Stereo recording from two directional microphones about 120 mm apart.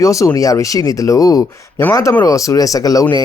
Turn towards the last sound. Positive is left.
turn(degrees=30)  # may be behind; listen again after turning